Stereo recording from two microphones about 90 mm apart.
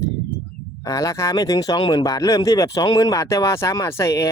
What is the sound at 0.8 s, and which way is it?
Speech, 40° left (ahead or behind).